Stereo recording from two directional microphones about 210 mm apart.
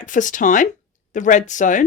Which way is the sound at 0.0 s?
35° left (ahead or behind).